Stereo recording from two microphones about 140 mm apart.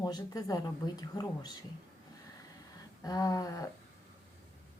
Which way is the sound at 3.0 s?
25° left (ahead or behind).